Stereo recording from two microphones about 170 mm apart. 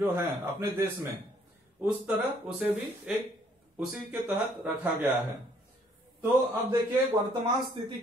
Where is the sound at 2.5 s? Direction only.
10° right (ahead or behind).